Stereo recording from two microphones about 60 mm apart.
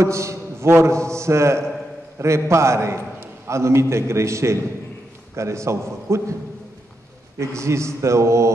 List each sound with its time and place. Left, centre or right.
0.0 s a man's voice: right
7.3 s speech: right